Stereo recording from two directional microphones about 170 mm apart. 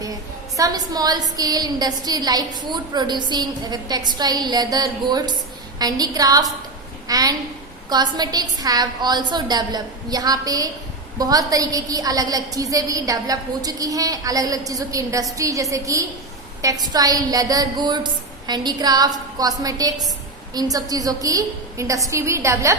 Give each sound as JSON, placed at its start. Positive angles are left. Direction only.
{"t": 0.0, "sound": "a woman's voice", "side_deg": -20}